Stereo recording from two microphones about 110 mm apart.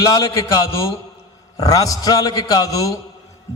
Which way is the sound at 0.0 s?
35° left (ahead or behind).